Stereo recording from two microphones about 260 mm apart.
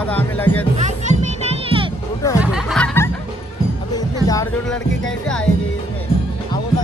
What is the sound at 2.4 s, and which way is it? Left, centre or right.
Music, centre.